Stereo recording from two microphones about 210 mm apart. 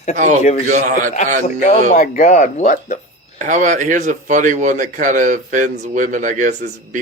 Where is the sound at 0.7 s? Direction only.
40° right (ahead or behind).